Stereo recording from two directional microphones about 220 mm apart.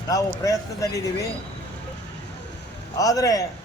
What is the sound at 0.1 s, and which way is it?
Speech, 15° left (ahead or behind).